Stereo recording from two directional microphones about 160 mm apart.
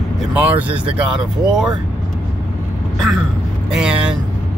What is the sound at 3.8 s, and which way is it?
Speech, 5° right (ahead or behind).